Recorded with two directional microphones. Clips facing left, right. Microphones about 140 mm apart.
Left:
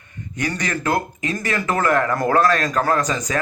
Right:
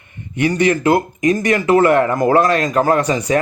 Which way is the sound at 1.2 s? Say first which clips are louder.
Right 10 dB; 30° left (ahead or behind).